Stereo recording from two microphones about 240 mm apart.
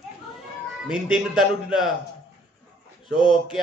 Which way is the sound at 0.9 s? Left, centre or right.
Centre.